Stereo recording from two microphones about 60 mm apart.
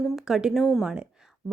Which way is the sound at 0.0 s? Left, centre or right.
Centre.